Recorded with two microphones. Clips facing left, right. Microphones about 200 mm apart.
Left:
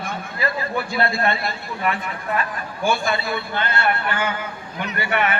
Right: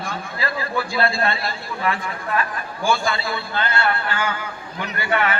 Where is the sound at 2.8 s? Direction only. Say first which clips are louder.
Even; 20° left (ahead or behind).